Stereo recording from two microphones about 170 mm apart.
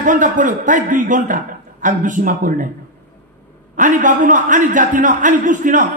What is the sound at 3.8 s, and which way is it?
A man's voice, 50° right (ahead or behind).